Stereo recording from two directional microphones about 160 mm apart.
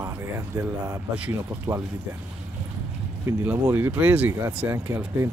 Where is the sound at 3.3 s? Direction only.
15° right (ahead or behind).